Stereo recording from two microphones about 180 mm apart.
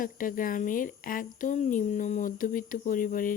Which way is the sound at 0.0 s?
50° left (ahead or behind).